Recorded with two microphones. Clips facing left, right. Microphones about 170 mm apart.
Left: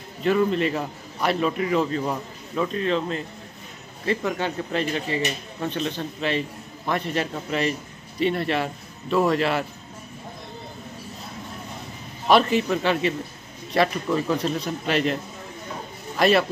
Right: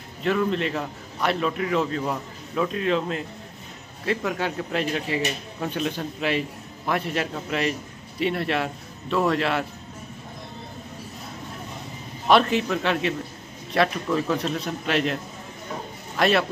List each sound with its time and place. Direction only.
0.2 s a man's voice: centre (ahead or behind)
12.3 s a man's voice: centre (ahead or behind)
16.2 s a man's voice: centre (ahead or behind)